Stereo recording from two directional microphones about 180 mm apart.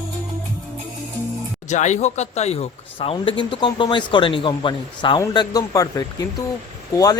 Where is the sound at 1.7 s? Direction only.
40° left (ahead or behind).